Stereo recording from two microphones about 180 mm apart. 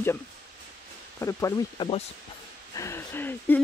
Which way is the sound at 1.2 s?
15° left (ahead or behind).